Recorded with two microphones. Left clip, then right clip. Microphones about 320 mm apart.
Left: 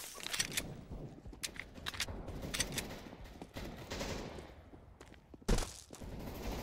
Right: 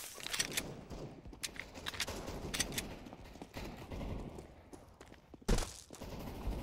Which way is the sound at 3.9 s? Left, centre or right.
Left.